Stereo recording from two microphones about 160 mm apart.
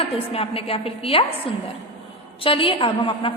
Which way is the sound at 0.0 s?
35° left (ahead or behind).